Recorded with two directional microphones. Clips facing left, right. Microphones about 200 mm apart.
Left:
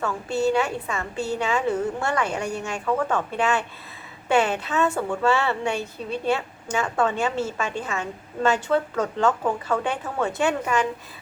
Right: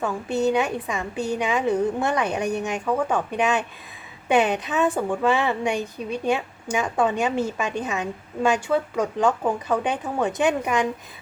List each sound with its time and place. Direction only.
0.0 s a woman's voice: 20° right (ahead or behind)